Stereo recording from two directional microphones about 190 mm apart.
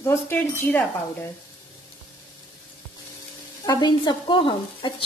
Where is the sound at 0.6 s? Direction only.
10° left (ahead or behind).